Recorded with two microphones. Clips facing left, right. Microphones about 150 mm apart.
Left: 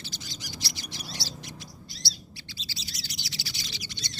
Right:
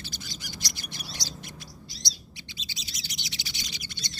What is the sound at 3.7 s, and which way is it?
Owl, 50° right (ahead or behind).